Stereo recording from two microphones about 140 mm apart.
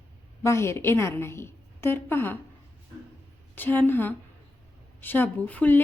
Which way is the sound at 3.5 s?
15° left (ahead or behind).